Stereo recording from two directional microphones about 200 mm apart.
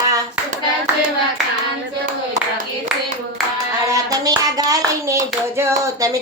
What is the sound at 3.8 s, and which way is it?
Hands, 15° right (ahead or behind).